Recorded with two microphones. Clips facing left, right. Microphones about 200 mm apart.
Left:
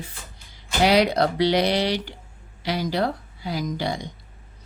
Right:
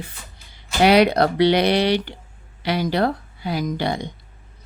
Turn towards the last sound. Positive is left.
turn(degrees=-60)  # may be behind; listen again after turning